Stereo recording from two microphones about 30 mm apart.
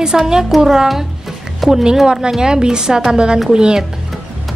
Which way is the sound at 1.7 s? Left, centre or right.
Right.